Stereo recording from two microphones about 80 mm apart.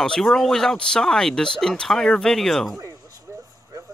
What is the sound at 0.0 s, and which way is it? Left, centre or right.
Speech, centre.